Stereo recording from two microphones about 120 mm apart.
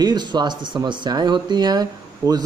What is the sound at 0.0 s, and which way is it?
A man's voice, 35° right (ahead or behind).